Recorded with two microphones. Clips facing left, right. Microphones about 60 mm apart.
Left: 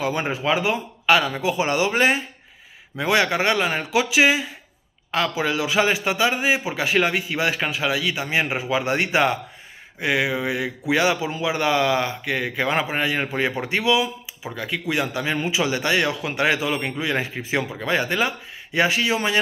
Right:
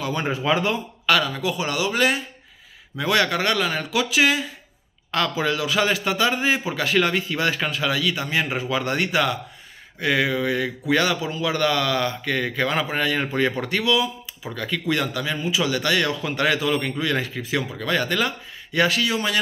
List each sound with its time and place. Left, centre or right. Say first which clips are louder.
0.0 s a man's voice: left 1 dB; centre
9.9 s a man's voice: right 1 dB; centre
15.5 s a man's voice: right 1 dB; left